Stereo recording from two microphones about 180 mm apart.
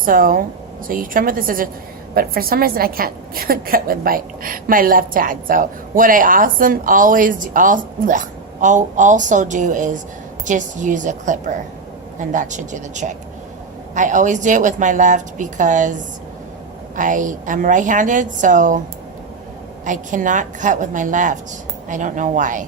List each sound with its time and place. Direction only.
0.0 s a woman's voice: 50° right (ahead or behind)
19.8 s a woman's voice: 45° right (ahead or behind)